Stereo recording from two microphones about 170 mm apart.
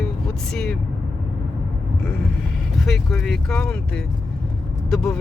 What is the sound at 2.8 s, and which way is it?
Speech, centre (ahead or behind).